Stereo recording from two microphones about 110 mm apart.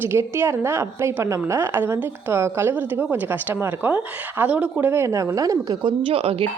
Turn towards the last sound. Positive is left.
turn(degrees=-60)  # may be behind; listen again after turning